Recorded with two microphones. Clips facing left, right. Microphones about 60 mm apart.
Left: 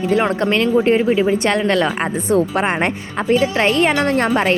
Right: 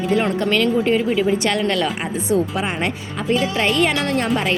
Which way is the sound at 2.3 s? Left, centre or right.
Left.